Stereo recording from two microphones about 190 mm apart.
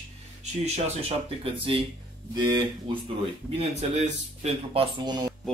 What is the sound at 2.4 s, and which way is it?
Speech, 25° right (ahead or behind).